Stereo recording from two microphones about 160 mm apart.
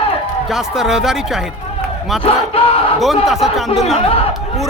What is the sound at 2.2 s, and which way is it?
Battle cry, 35° left (ahead or behind).